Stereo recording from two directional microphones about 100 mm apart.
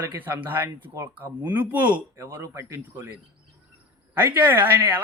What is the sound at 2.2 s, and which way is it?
Speech, 30° right (ahead or behind).